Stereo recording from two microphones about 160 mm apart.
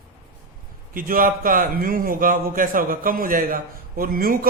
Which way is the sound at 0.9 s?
60° right (ahead or behind).